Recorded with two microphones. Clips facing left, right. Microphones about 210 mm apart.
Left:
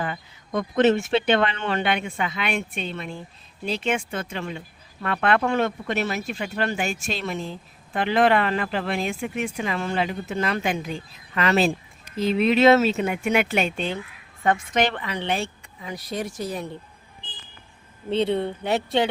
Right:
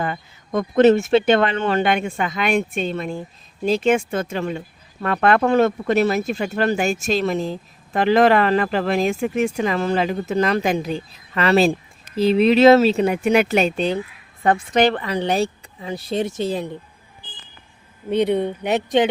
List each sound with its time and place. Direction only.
0.0 s speech: 45° right (ahead or behind); by 16.6 s 25° right (ahead or behind)
18.1 s speech: 15° right (ahead or behind)